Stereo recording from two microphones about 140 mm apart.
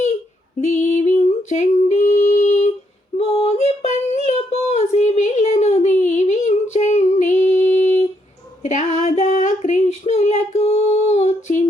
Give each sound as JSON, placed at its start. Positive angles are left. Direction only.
{"t": 0.6, "sound": "female singing", "side_deg": 55}
{"t": 4.3, "sound": "a sound", "side_deg": 45}
{"t": 8.6, "sound": "child singing", "side_deg": 55}